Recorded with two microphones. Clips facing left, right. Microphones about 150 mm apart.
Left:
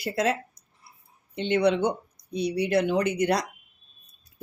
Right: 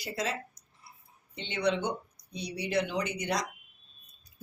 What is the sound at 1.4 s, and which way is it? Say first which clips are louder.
Speech: left 8 dB; 55° left (ahead or behind).